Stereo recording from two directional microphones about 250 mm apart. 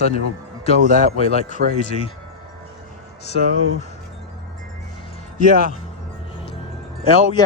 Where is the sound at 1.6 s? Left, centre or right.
Right.